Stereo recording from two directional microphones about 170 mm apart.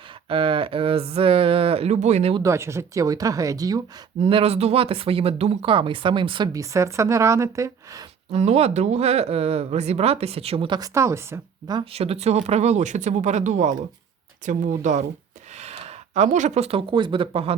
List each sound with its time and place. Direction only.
0.3 s speech: 30° right (ahead or behind)
2.3 s speech: 15° right (ahead or behind)
4.2 s speech: 35° right (ahead or behind); by 8.0 s 20° right (ahead or behind)
8.3 s speech: 40° right (ahead or behind); by 11.8 s 15° right (ahead or behind)
11.8 s speech: 35° right (ahead or behind)
16.1 s speech: 45° right (ahead or behind)